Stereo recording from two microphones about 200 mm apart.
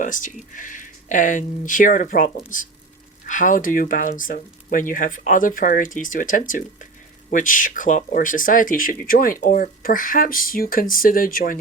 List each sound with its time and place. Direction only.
0.0 s speech: 40° left (ahead or behind)